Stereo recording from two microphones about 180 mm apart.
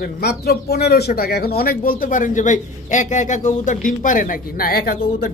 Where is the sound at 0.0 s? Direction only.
65° left (ahead or behind).